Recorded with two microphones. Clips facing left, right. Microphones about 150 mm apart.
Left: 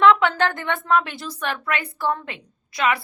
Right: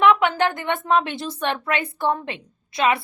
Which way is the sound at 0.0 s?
15° right (ahead or behind).